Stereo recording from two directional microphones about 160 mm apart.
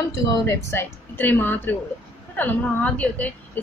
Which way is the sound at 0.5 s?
15° left (ahead or behind).